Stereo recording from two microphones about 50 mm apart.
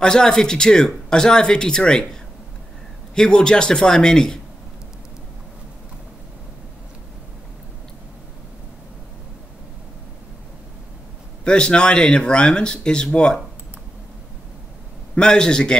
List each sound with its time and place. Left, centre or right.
0.0 s speech: centre
3.2 s speech: centre
11.4 s speech: centre
15.1 s speech: centre